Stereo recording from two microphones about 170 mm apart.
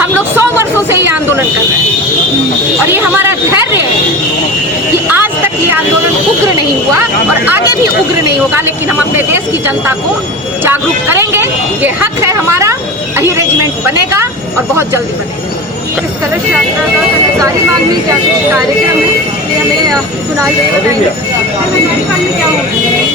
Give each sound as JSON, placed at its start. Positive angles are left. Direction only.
{"t": 0.0, "sound": "speech", "side_deg": -10}
{"t": 2.8, "sound": "speech", "side_deg": -15}
{"t": 5.1, "sound": "a sound", "side_deg": -10}
{"t": 8.2, "sound": "speech", "side_deg": -15}